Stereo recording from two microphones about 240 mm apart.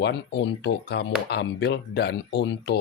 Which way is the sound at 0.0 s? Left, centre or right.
Left.